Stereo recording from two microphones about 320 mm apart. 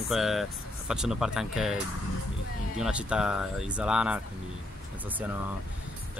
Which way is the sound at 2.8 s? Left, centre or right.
Centre.